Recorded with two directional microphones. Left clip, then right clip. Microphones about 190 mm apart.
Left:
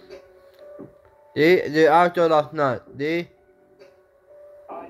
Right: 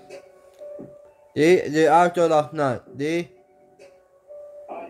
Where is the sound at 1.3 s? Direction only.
20° right (ahead or behind).